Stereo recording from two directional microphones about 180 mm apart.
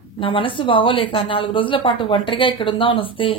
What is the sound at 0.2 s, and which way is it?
A woman's voice, 30° left (ahead or behind).